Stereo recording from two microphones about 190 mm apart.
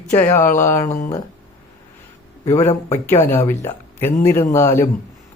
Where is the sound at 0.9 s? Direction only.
45° left (ahead or behind).